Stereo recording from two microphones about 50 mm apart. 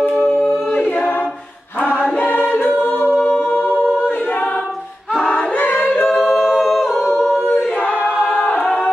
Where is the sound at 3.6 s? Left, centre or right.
Centre.